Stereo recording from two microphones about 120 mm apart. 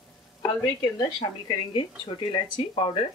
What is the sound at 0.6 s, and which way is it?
Speech, 40° left (ahead or behind).